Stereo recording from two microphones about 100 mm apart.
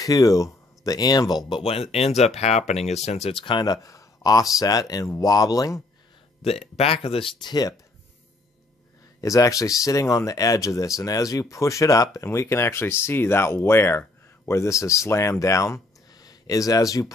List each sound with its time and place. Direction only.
0.0 s speech: 35° left (ahead or behind)
1.5 s speech: 75° left (ahead or behind); by 3.4 s 90° left
3.4 s speech: 50° left (ahead or behind)
3.7 s speech: 35° left (ahead or behind)
6.4 s speech: 90° left; by 7.5 s 60° left (ahead or behind)
9.2 s speech: 35° left (ahead or behind)